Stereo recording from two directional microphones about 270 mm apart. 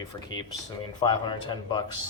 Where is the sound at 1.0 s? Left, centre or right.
Centre.